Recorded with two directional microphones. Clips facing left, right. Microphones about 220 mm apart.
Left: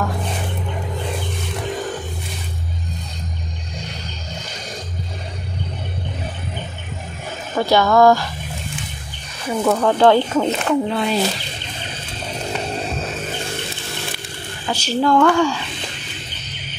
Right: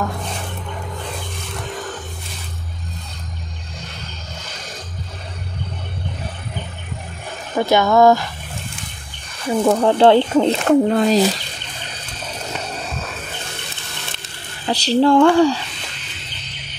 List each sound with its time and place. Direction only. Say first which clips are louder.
7.5 s speech: even; 20° right (ahead or behind)
9.5 s speech: right 2 dB; 25° right (ahead or behind)
10.7 s speech: right 5 dB; 45° right (ahead or behind)
14.7 s speech: right 3 dB; 35° right (ahead or behind)